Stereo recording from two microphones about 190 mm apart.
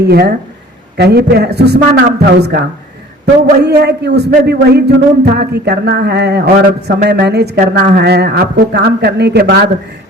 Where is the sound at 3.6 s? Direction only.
60° right (ahead or behind).